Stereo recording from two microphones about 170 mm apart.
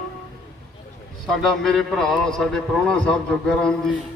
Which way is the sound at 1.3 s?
Centre (ahead or behind).